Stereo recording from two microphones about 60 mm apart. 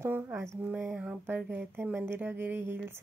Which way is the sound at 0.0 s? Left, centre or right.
Right.